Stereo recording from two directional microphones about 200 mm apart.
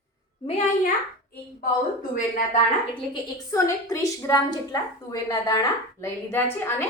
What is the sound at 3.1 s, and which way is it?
A woman's voice, 20° left (ahead or behind).